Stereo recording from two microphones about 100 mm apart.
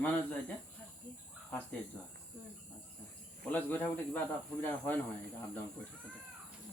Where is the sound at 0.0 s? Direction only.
15° left (ahead or behind).